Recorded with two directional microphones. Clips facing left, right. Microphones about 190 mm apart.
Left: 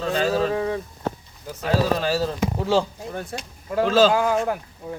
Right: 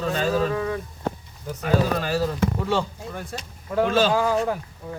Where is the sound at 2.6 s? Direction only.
30° left (ahead or behind).